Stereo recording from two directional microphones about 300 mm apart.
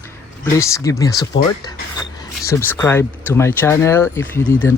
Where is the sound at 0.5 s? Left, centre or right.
Centre.